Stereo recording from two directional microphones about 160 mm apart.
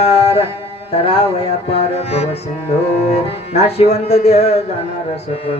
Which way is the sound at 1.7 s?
40° left (ahead or behind).